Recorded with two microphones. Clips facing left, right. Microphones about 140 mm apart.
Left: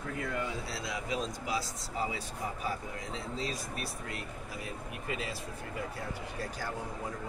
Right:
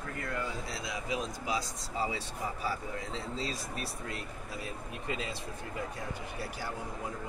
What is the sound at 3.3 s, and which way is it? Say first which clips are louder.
Speech: even; 30° right (ahead or behind).